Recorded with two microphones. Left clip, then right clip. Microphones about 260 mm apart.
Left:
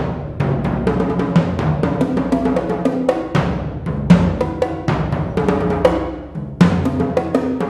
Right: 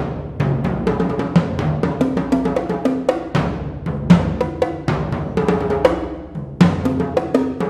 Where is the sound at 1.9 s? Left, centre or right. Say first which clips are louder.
Right 1 dB; right.